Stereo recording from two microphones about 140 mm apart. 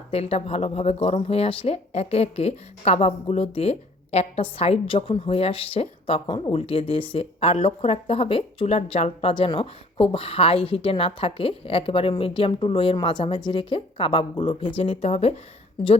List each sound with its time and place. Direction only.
0.1 s speech: 45° left (ahead or behind)